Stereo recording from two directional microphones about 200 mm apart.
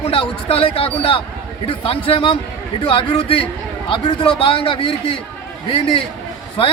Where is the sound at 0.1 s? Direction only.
25° left (ahead or behind).